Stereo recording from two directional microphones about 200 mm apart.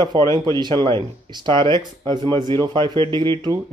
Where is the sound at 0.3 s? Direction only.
20° right (ahead or behind).